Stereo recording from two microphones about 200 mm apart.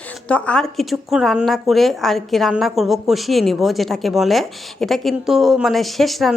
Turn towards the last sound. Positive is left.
turn(degrees=0)  # may be behind; listen again after turning